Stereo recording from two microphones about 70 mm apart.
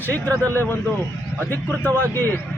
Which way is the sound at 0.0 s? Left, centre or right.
Left.